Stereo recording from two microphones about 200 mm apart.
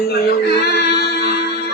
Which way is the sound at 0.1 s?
55° left (ahead or behind).